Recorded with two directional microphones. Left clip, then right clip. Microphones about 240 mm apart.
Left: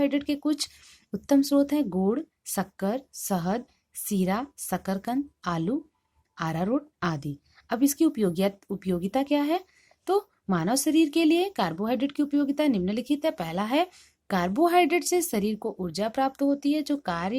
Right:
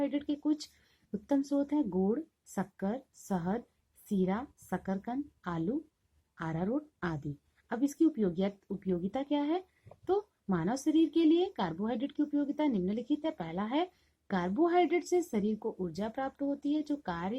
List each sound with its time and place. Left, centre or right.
0.0 s speech: left